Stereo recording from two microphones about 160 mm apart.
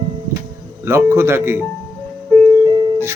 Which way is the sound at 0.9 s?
15° right (ahead or behind).